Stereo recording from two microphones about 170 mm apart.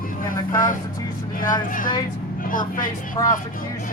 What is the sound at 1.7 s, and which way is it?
Speech, 55° left (ahead or behind).